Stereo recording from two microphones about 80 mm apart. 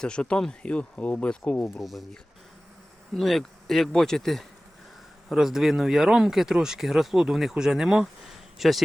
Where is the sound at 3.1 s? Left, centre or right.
Centre.